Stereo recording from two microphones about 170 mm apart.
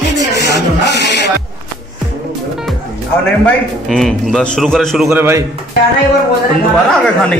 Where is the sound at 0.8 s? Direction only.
85° left.